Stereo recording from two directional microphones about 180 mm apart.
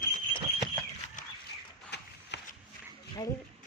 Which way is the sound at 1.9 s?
70° left (ahead or behind).